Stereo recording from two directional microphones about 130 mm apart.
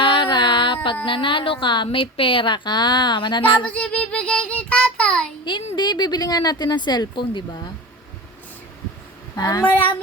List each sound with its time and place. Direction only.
0.0 s a sound: 40° left (ahead or behind)
1.0 s a woman's voice: 40° left (ahead or behind)
3.7 s child singing: 10° left (ahead or behind)
5.7 s a woman's voice: 35° left (ahead or behind)
9.4 s speech: 30° left (ahead or behind)
9.6 s child singing: 15° left (ahead or behind)